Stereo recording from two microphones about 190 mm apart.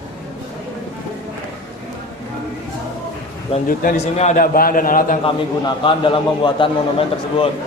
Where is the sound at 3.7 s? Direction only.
50° left (ahead or behind).